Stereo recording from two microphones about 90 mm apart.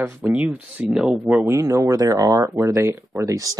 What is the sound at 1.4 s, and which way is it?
Speech, 35° right (ahead or behind).